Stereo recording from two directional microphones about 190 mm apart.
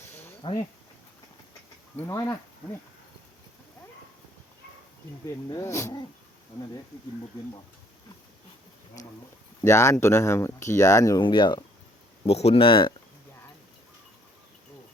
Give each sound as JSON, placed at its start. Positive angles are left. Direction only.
{"t": 0.0, "sound": "a sound", "side_deg": 15}
{"t": 2.0, "sound": "speech", "side_deg": 15}
{"t": 5.3, "sound": "speech", "side_deg": 15}
{"t": 9.6, "sound": "speech", "side_deg": 15}